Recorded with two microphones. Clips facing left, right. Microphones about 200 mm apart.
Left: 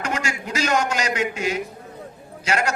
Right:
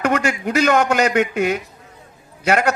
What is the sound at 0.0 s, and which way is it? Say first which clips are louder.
A man's voice: right 8 dB; 60° right (ahead or behind).